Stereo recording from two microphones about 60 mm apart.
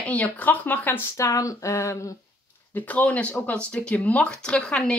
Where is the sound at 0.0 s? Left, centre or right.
Left.